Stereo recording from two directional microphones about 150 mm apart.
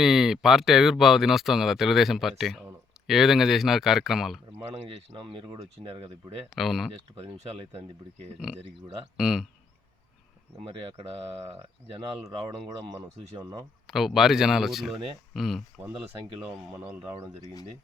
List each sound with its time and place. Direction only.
0.0 s speech: centre (ahead or behind)
4.7 s speech: 40° right (ahead or behind)
6.5 s speech: centre (ahead or behind)
9.1 s speech: 5° right (ahead or behind)
10.7 s speech: 35° right (ahead or behind)
12.2 s speech: 25° right (ahead or behind)
13.8 s speech: centre (ahead or behind)
16.7 s speech: 15° right (ahead or behind)
17.4 s speech: 25° left (ahead or behind)